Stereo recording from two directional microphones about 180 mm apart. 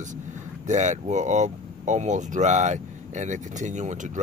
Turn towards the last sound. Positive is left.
turn(degrees=-40)  # may be behind; listen again after turning